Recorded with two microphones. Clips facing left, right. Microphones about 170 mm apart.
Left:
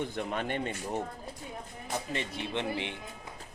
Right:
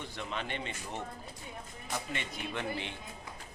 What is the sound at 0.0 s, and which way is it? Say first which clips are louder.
Speech: left 6 dB; 50° left (ahead or behind).